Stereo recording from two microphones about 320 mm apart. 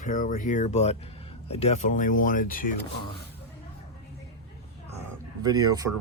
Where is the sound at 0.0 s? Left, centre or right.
Left.